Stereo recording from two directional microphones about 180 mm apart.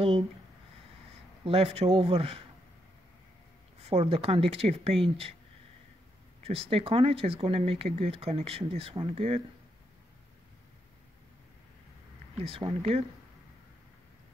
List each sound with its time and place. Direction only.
1.4 s speech: 30° right (ahead or behind)
3.8 s speech: 35° right (ahead or behind)
6.4 s speech: 35° right (ahead or behind)
12.4 s speech: 35° right (ahead or behind)